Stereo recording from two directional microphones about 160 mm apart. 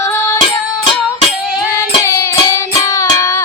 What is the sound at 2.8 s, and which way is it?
Child singing, 20° left (ahead or behind).